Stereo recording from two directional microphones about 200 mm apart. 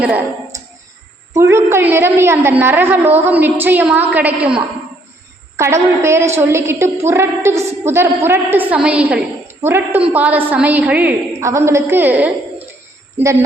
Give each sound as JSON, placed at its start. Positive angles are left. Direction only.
{"t": 0.0, "sound": "a woman's voice", "side_deg": -10}
{"t": 5.5, "sound": "a woman's voice", "side_deg": -15}